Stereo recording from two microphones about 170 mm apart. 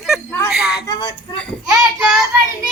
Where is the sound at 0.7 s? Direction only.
25° left (ahead or behind).